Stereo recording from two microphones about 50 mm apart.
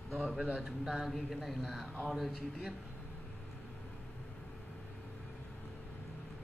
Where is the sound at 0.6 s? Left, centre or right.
Centre.